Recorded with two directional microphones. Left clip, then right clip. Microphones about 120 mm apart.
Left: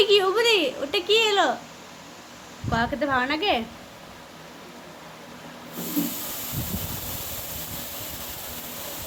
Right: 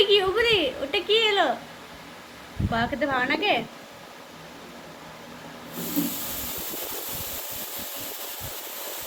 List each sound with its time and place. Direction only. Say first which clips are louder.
0.0 s a woman's voice: left 1 dB; 20° left (ahead or behind)
2.7 s a woman's voice: left 1 dB; 15° left (ahead or behind)